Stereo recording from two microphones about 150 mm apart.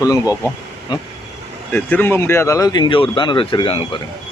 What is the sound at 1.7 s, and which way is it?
Speech, 15° left (ahead or behind).